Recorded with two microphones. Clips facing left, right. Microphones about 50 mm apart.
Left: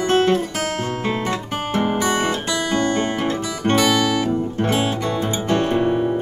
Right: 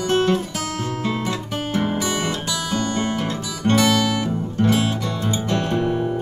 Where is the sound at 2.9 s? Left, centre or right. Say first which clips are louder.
Left 3 dB; left.